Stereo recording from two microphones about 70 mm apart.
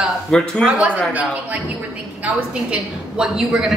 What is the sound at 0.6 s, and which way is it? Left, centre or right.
Speech, centre.